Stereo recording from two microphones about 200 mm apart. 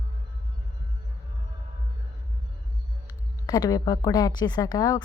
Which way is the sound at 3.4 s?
20° left (ahead or behind).